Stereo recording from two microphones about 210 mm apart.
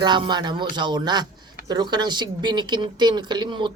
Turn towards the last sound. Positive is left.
turn(degrees=-20)  # may be behind; listen again after turning